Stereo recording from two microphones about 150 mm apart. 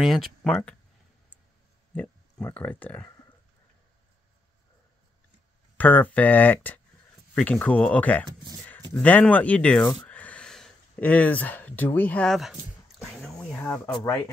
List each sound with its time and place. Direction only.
0.0 s speech: centre (ahead or behind)
2.0 s speech: 10° left (ahead or behind)
5.8 s speech: 10° left (ahead or behind)
10.0 s a sound: 10° left (ahead or behind)
13.1 s speech: centre (ahead or behind)